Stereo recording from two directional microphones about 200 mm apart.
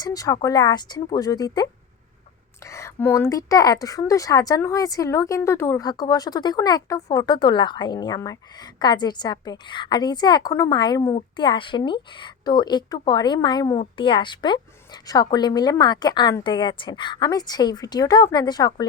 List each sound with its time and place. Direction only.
0.0 s a woman's voice: 20° left (ahead or behind)